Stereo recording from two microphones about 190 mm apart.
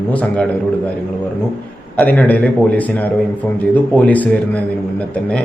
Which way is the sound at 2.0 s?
10° left (ahead or behind).